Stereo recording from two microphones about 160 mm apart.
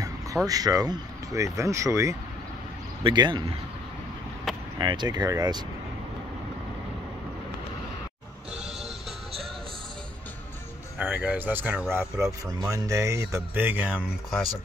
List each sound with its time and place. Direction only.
0.5 s speech: 25° right (ahead or behind)
3.0 s speech: 30° right (ahead or behind)
4.7 s speech: 25° right (ahead or behind)
11.0 s speech: 10° right (ahead or behind)